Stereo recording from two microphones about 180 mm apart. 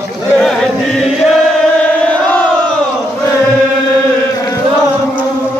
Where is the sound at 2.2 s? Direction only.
10° left (ahead or behind).